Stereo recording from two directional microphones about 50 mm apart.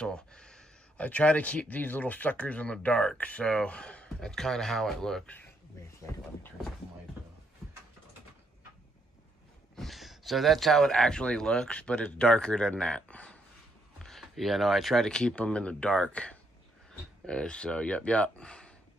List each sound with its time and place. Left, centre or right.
0.0 s speech: centre
0.9 s speech: left
3.2 s speech: left
3.4 s speech: centre
4.3 s speech: centre
9.8 s a sound: centre
11.0 s speech: centre
13.9 s speech: centre
15.0 s speech: centre